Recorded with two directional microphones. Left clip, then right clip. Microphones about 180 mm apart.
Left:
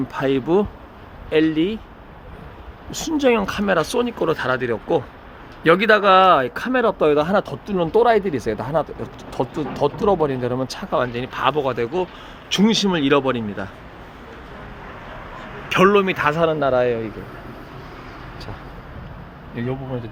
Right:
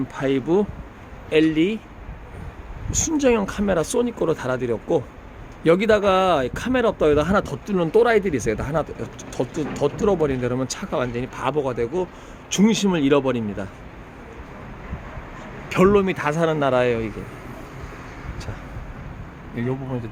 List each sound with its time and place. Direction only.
0.1 s speech: 20° left (ahead or behind)
1.3 s speech: centre (ahead or behind)
2.9 s speech: 15° left (ahead or behind)
15.7 s speech: centre (ahead or behind); by 17.1 s 15° right (ahead or behind)